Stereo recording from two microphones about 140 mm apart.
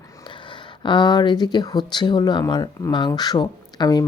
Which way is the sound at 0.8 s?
35° left (ahead or behind).